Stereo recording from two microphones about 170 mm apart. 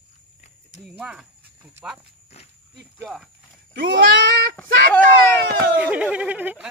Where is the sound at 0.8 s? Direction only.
Centre (ahead or behind).